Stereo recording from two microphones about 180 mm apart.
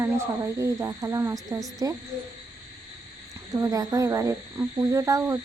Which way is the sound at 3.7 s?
20° right (ahead or behind).